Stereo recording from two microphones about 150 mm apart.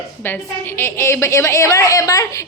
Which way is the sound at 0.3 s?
15° left (ahead or behind).